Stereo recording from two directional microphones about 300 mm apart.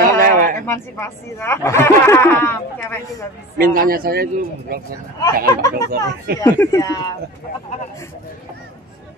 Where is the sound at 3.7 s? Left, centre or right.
Right.